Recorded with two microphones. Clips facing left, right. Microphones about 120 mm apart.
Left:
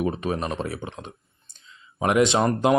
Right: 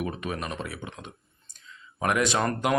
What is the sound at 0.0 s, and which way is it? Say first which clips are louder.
Speech: left 6 dB; 30° left (ahead or behind).